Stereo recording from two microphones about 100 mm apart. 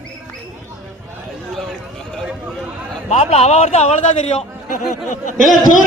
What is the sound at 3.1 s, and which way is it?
Speech, 90° left.